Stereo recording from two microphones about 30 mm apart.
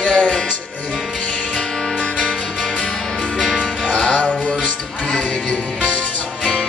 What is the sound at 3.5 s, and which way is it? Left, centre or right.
Music, left.